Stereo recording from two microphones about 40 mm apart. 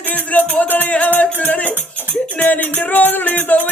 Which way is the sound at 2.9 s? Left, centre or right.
Left.